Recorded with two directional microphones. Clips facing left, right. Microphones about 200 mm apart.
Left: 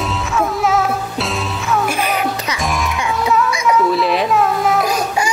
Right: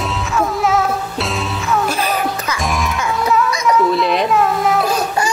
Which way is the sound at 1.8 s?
10° left (ahead or behind).